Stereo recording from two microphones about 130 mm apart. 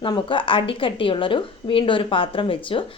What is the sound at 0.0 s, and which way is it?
A woman's voice, 40° left (ahead or behind).